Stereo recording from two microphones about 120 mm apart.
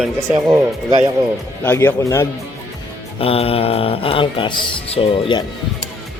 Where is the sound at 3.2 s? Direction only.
50° left (ahead or behind).